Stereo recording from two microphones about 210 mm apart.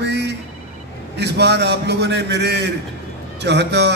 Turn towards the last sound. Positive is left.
turn(degrees=-55)  # may be behind; listen again after turning